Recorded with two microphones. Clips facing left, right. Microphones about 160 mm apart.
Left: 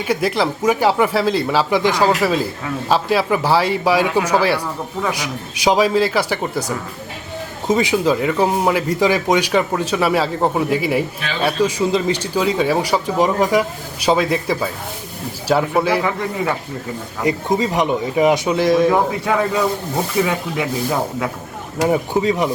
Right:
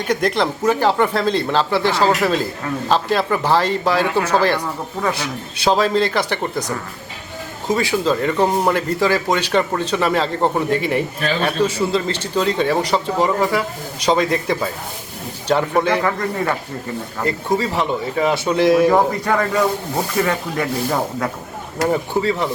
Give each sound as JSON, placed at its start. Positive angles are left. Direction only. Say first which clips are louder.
{"t": 0.0, "sound": "speech", "louder": "even", "side_deg": 5}
{"t": 7.7, "sound": "speech", "louder": "left 2 dB", "side_deg": 20}
{"t": 17.2, "sound": "speech", "louder": "left 2 dB", "side_deg": 15}
{"t": 18.5, "sound": "speech", "louder": "right 1 dB", "side_deg": 0}